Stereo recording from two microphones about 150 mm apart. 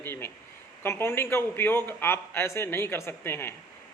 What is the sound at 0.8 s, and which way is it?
Speech, 15° left (ahead or behind).